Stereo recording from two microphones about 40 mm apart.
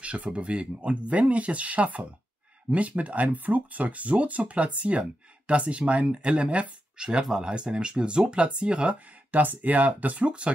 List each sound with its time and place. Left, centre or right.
0.0 s speech: right
9.3 s speech: right
10.2 s speech: right